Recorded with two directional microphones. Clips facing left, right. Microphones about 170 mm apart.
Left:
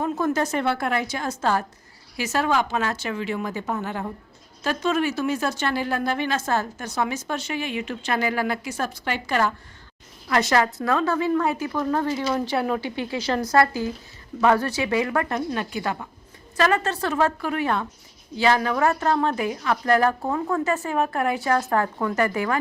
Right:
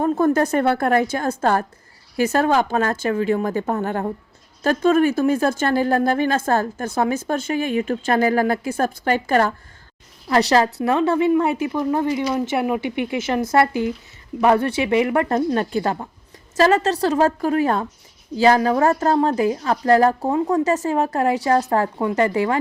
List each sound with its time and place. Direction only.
0.0 s speech: 55° right (ahead or behind)
10.2 s a woman's voice: 30° right (ahead or behind)
15.4 s a woman's voice: 40° right (ahead or behind); by 22.5 s 25° right (ahead or behind)